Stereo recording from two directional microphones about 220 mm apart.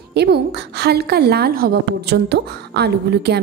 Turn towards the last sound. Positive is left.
turn(degrees=-50)  # may be behind; listen again after turning